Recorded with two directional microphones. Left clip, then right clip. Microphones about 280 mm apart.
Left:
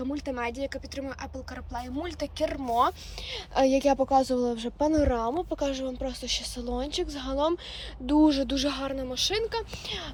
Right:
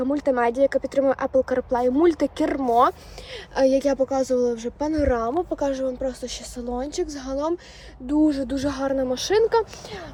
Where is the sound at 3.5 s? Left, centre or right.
Centre.